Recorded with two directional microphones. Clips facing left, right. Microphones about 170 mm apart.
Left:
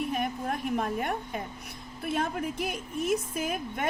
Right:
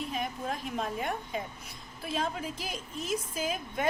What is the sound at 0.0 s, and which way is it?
A woman's voice, 60° left (ahead or behind).